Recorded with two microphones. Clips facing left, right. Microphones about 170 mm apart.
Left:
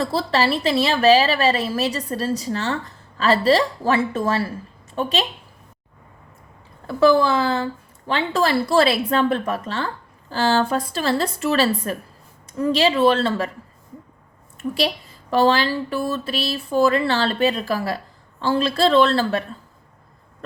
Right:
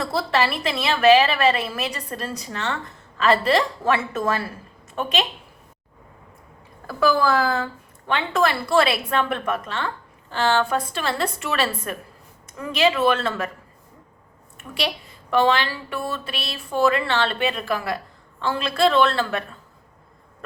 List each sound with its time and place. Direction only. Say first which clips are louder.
0.0 s a woman's voice: left 2 dB; 35° left (ahead or behind)
6.8 s a woman's voice: left 4 dB; 25° left (ahead or behind)
14.6 s a woman's voice: left 5 dB; 35° left (ahead or behind)